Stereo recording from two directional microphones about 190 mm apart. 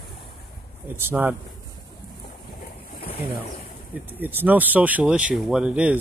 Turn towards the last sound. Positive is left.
turn(degrees=-5)  # may be behind; listen again after turning